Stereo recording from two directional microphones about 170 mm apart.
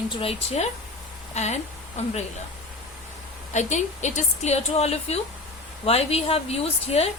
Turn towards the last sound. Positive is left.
turn(degrees=35)  # may be behind; listen again after turning